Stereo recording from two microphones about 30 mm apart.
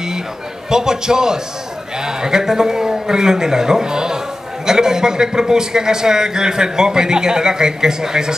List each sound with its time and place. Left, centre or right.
0.7 s a man's voice: right